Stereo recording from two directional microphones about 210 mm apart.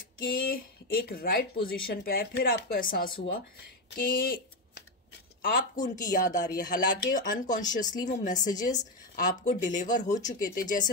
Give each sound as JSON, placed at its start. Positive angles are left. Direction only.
{"t": 0.2, "sound": "speech", "side_deg": 45}
{"t": 5.4, "sound": "a woman's voice", "side_deg": 40}